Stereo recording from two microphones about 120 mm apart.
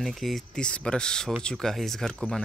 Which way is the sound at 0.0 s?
Centre (ahead or behind).